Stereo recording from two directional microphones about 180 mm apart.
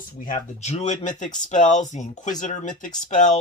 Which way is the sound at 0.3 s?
35° left (ahead or behind).